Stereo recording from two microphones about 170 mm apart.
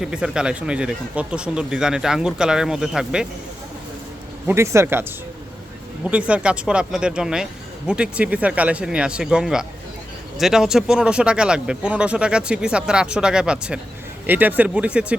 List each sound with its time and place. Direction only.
0.0 s speech: 5° right (ahead or behind)
4.4 s speech: 15° right (ahead or behind)
6.1 s speech: 5° right (ahead or behind)